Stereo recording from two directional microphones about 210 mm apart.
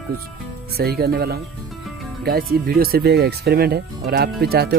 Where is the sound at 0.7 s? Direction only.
45° right (ahead or behind).